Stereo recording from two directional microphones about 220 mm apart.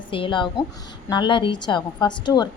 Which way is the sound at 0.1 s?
20° left (ahead or behind).